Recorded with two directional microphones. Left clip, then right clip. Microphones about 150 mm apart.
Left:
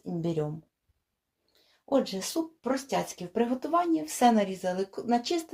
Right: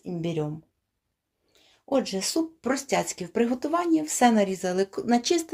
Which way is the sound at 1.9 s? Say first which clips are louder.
Right 2 dB; 25° right (ahead or behind).